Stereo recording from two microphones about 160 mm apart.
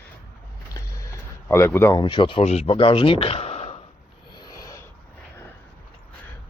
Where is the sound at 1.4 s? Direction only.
15° left (ahead or behind).